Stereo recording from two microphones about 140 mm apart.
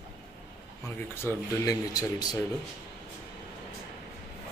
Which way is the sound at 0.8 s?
20° left (ahead or behind).